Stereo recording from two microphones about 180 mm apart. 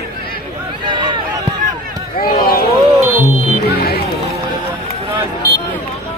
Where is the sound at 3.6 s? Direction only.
60° left (ahead or behind).